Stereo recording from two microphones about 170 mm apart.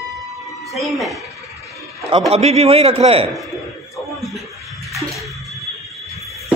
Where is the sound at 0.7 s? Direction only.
Centre (ahead or behind).